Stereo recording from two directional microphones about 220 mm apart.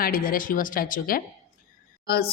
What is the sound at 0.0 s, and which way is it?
Speech, 40° left (ahead or behind).